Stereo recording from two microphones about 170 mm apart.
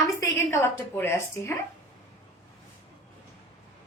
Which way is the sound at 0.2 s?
15° left (ahead or behind).